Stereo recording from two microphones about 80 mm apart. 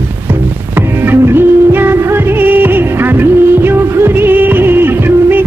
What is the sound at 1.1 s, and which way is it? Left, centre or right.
Music, right.